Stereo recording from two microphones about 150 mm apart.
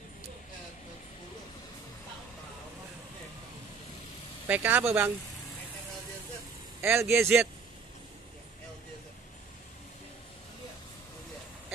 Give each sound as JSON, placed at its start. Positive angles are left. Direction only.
{"t": 4.5, "sound": "speech", "side_deg": -15}
{"t": 6.8, "sound": "speech", "side_deg": -15}